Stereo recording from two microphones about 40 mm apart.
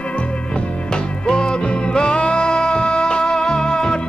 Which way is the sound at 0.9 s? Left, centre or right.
Left.